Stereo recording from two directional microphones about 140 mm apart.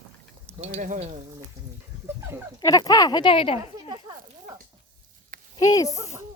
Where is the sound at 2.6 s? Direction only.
25° left (ahead or behind).